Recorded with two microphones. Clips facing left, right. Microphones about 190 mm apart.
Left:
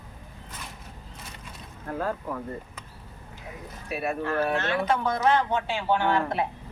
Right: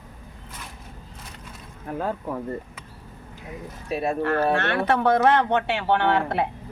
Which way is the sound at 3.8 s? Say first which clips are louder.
Right 4 dB; 30° right (ahead or behind).